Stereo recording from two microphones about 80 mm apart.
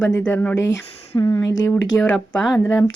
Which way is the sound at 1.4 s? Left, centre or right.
Left.